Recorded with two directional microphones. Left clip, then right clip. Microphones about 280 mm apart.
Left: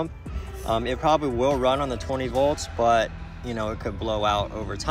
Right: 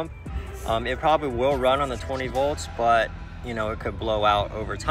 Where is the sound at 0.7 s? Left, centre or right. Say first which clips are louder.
Even; left.